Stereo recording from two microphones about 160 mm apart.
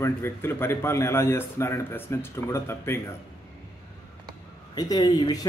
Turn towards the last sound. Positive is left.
turn(degrees=25)  # may be behind; listen again after turning